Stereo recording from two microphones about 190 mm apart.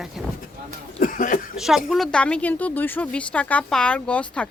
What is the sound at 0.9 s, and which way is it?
Cough, 45° left (ahead or behind).